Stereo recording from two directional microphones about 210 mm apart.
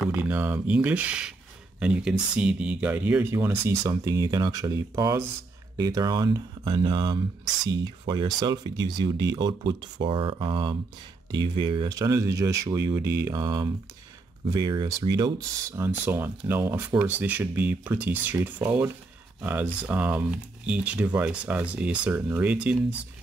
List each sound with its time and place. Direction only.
0.1 s speech: 10° right (ahead or behind)